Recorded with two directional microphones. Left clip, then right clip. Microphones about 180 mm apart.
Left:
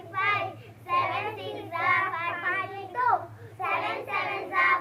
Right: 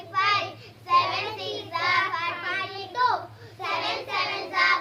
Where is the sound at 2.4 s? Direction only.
35° right (ahead or behind).